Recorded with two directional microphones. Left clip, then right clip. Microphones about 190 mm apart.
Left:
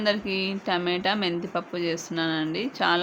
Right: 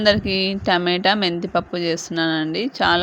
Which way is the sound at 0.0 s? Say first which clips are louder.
Right 8 dB; 35° right (ahead or behind).